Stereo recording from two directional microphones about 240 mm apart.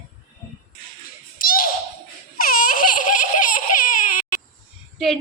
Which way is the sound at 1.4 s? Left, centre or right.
Left.